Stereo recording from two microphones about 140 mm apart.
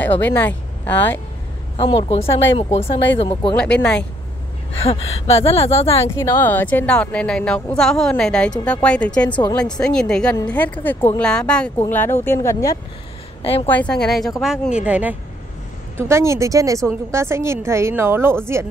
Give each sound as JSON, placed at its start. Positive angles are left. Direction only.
{"t": 0.0, "sound": "speech", "side_deg": 15}
{"t": 1.8, "sound": "speech", "side_deg": 40}
{"t": 3.5, "sound": "a woman's voice", "side_deg": 10}
{"t": 4.8, "sound": "speech", "side_deg": 45}
{"t": 6.0, "sound": "a woman's voice", "side_deg": 20}
{"t": 13.4, "sound": "a woman's voice", "side_deg": 45}
{"t": 13.7, "sound": "a woman's voice", "side_deg": 10}